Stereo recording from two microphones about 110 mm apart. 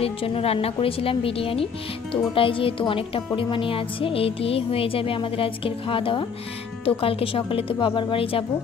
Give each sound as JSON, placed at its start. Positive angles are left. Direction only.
{"t": 0.0, "sound": "music", "side_deg": 60}